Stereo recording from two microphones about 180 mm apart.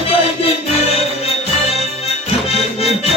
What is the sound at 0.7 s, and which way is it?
Music, 35° left (ahead or behind).